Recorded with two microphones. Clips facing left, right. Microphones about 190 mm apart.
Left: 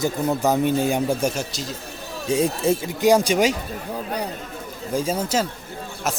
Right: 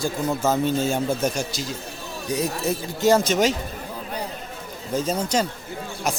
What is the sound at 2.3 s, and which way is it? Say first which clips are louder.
Speech: left 5 dB; 30° left (ahead or behind).